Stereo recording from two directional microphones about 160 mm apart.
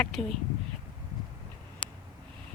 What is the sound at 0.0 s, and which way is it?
Speech, centre (ahead or behind).